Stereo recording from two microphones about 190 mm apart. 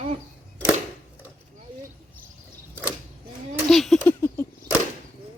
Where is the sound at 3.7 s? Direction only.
Centre (ahead or behind).